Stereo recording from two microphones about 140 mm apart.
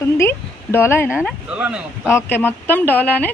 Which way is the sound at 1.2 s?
10° right (ahead or behind).